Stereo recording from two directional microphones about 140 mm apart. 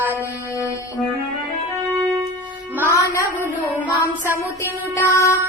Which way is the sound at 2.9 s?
20° left (ahead or behind).